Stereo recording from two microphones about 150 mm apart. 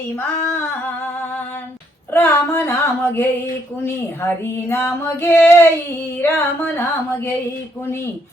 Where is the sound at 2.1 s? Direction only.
15° left (ahead or behind).